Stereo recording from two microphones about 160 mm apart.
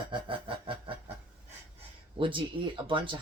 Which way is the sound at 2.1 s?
30° right (ahead or behind).